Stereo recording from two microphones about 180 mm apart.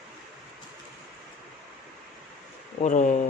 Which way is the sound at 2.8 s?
45° left (ahead or behind).